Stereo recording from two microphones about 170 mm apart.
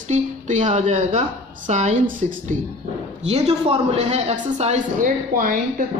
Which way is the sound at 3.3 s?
40° right (ahead or behind).